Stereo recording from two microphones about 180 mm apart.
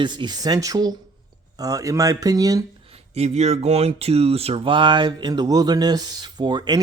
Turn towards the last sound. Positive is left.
turn(degrees=-25)  # may be behind; listen again after turning